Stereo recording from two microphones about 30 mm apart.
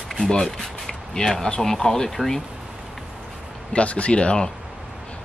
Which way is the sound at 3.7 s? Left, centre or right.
Left.